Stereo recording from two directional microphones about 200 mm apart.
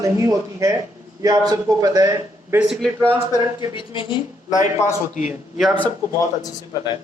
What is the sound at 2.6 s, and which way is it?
Speech, centre (ahead or behind).